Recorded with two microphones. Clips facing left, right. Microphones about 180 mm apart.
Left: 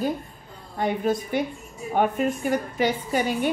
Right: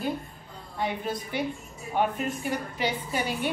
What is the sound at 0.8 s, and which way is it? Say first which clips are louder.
A woman's voice: left 7 dB; 50° left (ahead or behind).